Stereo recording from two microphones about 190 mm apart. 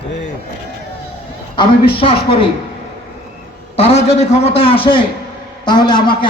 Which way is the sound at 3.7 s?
30° left (ahead or behind).